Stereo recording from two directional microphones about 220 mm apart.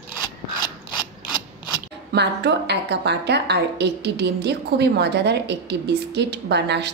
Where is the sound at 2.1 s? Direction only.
50° right (ahead or behind).